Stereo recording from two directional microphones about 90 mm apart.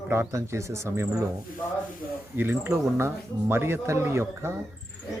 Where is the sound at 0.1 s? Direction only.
30° right (ahead or behind).